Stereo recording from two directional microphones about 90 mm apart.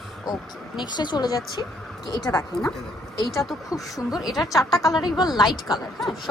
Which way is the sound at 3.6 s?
40° left (ahead or behind).